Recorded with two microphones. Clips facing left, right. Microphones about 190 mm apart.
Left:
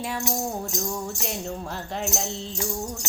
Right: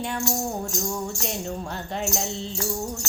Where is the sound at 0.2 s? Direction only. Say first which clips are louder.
Right 1 dB; 20° left (ahead or behind).